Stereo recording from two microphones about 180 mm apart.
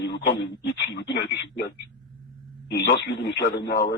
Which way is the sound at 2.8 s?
70° left (ahead or behind).